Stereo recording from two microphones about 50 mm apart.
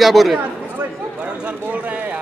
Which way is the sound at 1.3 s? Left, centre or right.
Right.